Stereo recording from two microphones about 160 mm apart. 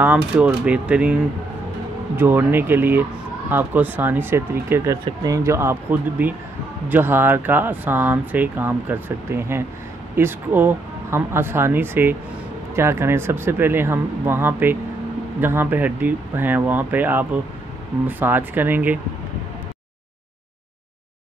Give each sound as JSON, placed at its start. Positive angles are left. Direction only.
{"t": 0.0, "sound": "speech", "side_deg": -10}